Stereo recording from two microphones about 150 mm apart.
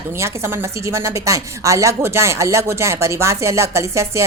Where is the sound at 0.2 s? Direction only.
15° right (ahead or behind).